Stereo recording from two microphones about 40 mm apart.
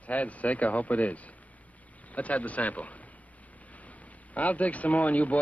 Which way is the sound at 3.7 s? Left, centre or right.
Left.